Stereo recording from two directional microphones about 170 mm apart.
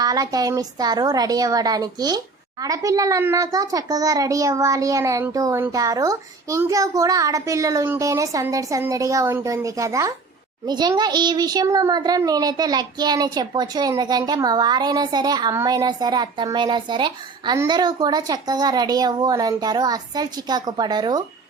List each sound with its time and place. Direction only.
0.0 s a child's voice: 20° right (ahead or behind)